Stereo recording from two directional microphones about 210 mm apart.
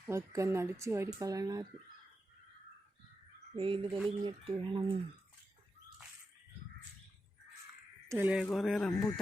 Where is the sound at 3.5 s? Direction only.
25° right (ahead or behind).